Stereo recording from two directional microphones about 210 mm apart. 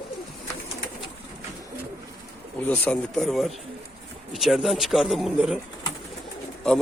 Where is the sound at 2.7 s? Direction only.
5° left (ahead or behind).